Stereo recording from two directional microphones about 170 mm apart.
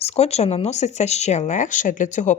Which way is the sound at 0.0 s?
40° left (ahead or behind).